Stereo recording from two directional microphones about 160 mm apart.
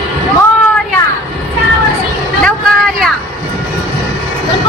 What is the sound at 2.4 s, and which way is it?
Vehicle, 5° left (ahead or behind).